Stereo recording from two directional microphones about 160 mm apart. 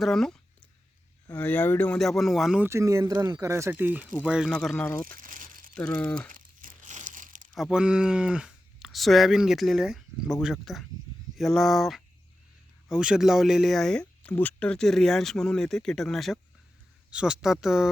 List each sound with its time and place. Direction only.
0.0 s speech: centre (ahead or behind)
2.6 s speech: 20° right (ahead or behind); by 4.9 s 5° left (ahead or behind)
5.0 s crumpling: 60° right (ahead or behind)
5.7 s speech: 5° left (ahead or behind)
6.2 s crumpling: 60° right (ahead or behind)
7.5 s speech: 5° right (ahead or behind)